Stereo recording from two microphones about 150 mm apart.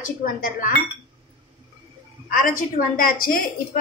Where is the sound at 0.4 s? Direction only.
65° left (ahead or behind).